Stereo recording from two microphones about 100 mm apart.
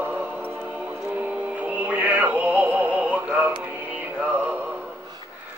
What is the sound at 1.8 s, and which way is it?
Synthetic singing, 15° right (ahead or behind).